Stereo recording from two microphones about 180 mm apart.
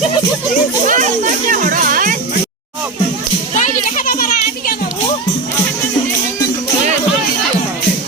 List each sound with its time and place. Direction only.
0.9 s music: 45° right (ahead or behind)
3.5 s music: 45° left (ahead or behind)